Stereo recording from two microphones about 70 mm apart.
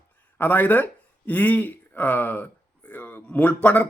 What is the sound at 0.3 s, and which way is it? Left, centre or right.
Speech, left.